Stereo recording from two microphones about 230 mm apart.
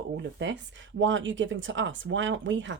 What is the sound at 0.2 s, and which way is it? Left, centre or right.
Speech, right.